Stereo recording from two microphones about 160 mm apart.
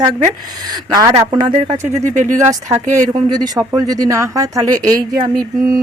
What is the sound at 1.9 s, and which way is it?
Speech, 50° right (ahead or behind).